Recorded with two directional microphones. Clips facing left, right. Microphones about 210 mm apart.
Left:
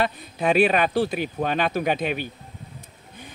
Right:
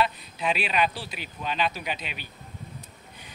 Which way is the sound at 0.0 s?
50° left (ahead or behind).